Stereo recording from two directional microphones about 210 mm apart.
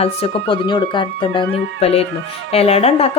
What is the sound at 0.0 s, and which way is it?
Speech, 30° left (ahead or behind).